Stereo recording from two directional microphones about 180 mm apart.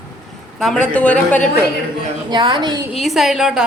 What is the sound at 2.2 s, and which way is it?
Speech, 25° right (ahead or behind).